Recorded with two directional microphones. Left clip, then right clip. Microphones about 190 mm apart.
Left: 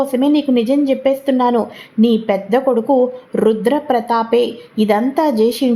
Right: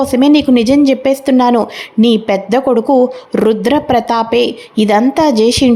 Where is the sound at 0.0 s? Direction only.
25° right (ahead or behind).